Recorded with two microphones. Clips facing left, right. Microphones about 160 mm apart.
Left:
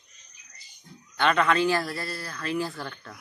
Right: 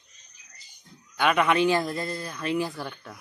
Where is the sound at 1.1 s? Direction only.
10° right (ahead or behind).